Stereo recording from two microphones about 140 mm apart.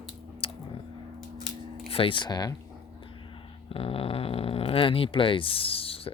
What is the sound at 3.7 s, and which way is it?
Speech, 40° left (ahead or behind).